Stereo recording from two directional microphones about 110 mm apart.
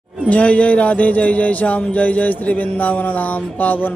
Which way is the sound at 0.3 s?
10° left (ahead or behind).